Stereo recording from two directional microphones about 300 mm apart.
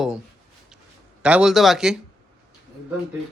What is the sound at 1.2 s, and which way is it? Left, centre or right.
Speech, centre.